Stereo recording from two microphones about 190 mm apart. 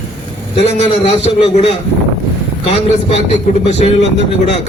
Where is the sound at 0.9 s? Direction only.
30° left (ahead or behind).